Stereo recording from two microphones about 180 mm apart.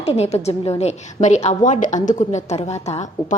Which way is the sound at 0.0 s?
35° left (ahead or behind).